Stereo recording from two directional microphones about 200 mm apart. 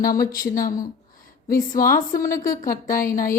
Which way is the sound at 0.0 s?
45° left (ahead or behind).